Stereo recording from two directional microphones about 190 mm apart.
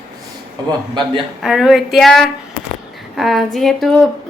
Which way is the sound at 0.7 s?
25° right (ahead or behind).